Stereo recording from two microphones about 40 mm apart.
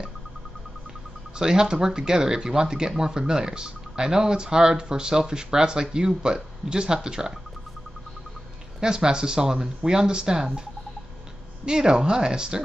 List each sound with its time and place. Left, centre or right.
1.4 s speech: centre
8.8 s speech: centre
11.6 s speech: right